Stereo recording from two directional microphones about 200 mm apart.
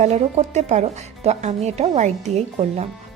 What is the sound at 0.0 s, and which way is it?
Speech, 35° right (ahead or behind).